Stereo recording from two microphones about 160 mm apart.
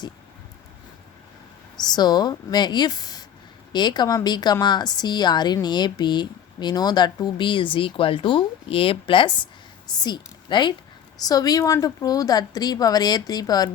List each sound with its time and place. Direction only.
1.7 s a woman's voice: 25° left (ahead or behind)